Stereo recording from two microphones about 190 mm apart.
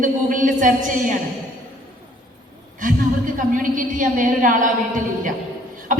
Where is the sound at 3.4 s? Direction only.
45° right (ahead or behind).